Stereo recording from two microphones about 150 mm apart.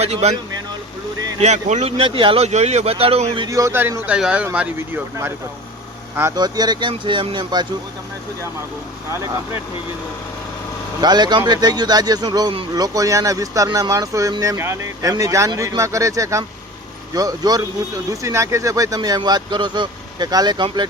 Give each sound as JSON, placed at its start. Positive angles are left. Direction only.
{"t": 0.0, "sound": "speech", "side_deg": -45}
{"t": 1.4, "sound": "speech", "side_deg": -50}
{"t": 3.4, "sound": "speech", "side_deg": -20}
{"t": 6.3, "sound": "speech", "side_deg": -25}
{"t": 11.0, "sound": "speech", "side_deg": -30}